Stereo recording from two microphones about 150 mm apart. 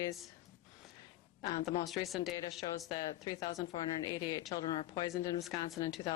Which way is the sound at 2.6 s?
25° left (ahead or behind).